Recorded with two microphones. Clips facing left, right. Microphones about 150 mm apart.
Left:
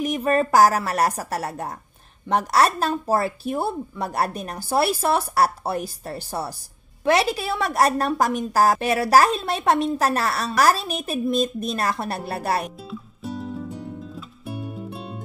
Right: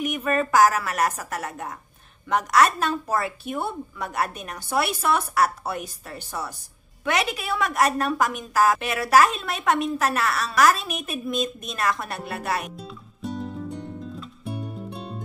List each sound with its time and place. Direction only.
0.0 s a woman's voice: 35° left (ahead or behind)
12.9 s music: centre (ahead or behind)